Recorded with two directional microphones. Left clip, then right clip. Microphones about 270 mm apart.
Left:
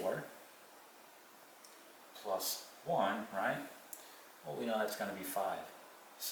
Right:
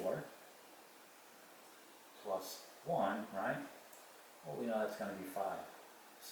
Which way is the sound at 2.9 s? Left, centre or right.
Centre.